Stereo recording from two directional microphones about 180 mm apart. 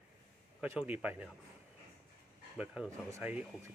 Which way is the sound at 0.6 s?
5° right (ahead or behind).